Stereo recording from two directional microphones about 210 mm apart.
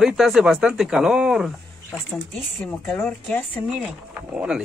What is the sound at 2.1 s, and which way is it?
Speech, 10° left (ahead or behind).